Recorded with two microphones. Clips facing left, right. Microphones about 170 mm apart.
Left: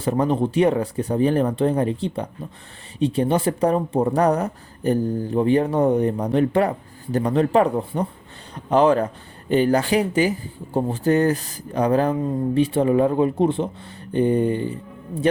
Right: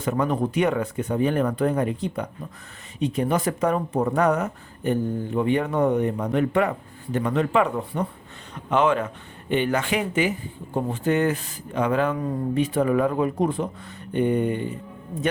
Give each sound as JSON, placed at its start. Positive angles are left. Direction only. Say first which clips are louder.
{"t": 0.0, "sound": "speech", "louder": "left 3 dB", "side_deg": 30}